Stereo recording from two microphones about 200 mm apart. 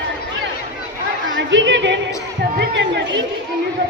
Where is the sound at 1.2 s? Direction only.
70° right (ahead or behind).